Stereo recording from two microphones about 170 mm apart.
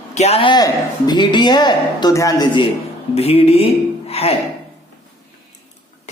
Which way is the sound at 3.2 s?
35° left (ahead or behind).